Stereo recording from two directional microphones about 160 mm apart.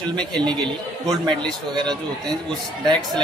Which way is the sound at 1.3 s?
5° left (ahead or behind).